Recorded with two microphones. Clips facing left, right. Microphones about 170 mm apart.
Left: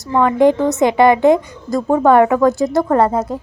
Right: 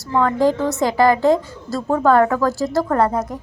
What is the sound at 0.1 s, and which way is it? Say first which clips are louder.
A woman's voice: left 4 dB; 20° left (ahead or behind).